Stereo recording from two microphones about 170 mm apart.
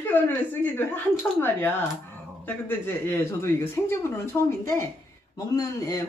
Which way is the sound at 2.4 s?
10° left (ahead or behind).